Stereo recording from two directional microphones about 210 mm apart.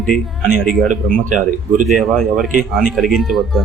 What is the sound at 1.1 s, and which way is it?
Speech, 40° right (ahead or behind).